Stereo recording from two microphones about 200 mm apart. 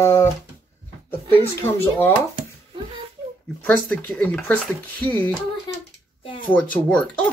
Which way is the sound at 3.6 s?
5° left (ahead or behind).